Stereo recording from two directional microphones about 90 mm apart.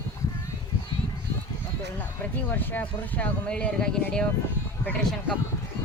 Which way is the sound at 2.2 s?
20° left (ahead or behind).